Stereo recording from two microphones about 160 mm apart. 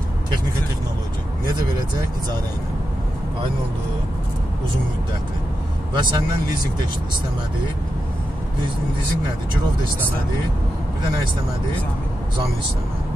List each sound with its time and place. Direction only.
5.9 s speech: 30° right (ahead or behind)